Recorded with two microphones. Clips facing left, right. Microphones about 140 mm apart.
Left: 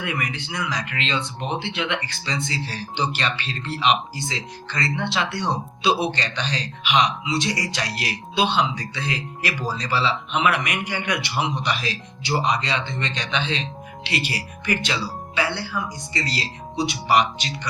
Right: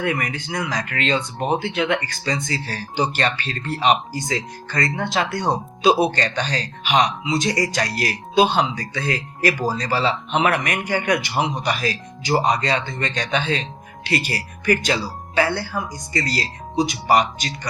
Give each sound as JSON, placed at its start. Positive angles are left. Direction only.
{"t": 0.0, "sound": "speech", "side_deg": -40}